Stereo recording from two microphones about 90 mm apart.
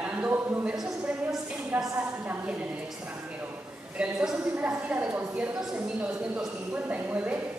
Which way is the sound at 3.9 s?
10° right (ahead or behind).